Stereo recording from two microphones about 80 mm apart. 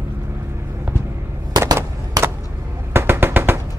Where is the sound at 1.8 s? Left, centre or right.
Right.